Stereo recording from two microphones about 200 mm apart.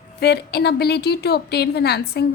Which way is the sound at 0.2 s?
55° left (ahead or behind).